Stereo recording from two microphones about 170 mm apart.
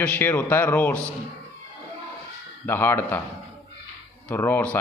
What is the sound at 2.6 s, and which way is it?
Speech, 15° left (ahead or behind).